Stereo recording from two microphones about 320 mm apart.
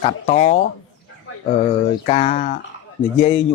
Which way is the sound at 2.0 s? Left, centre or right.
Left.